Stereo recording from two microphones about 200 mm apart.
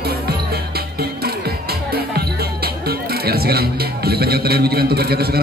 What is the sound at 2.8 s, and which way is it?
A man's voice, 50° right (ahead or behind).